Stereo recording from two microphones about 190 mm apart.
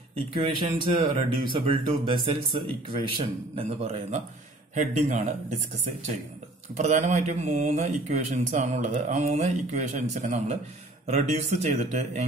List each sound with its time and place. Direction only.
0.1 s speech: 30° right (ahead or behind)
6.8 s speech: 40° right (ahead or behind)